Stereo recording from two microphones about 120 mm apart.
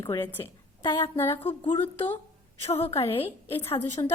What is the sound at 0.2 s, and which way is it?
Speech, 15° left (ahead or behind).